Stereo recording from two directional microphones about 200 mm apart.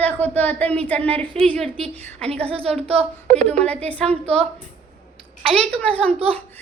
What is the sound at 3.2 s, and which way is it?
A woman's voice, 35° right (ahead or behind).